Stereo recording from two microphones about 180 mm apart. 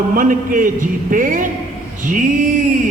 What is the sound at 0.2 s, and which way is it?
A man's voice, 50° right (ahead or behind).